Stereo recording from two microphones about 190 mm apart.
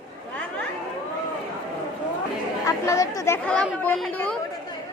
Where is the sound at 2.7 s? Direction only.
15° left (ahead or behind).